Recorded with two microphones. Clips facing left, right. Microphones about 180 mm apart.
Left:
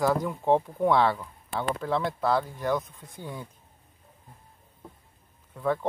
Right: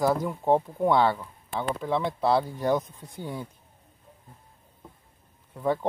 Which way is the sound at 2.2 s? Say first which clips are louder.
Right 2 dB; 30° right (ahead or behind).